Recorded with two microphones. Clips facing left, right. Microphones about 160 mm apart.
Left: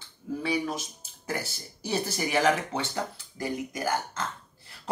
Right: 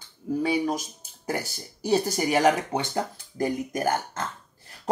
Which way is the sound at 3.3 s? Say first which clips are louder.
Right 7 dB; 45° right (ahead or behind).